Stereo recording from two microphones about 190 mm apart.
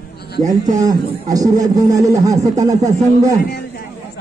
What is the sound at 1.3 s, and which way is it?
Speech, 20° right (ahead or behind).